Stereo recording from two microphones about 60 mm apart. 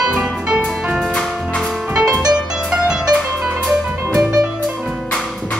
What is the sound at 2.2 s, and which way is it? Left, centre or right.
Music, centre.